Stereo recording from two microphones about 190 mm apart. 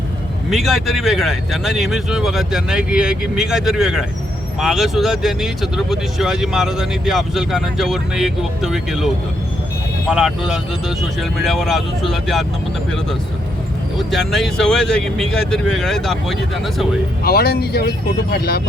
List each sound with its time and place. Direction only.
0.5 s speech: centre (ahead or behind)
14.1 s speech: centre (ahead or behind)
17.2 s speech: 55° left (ahead or behind)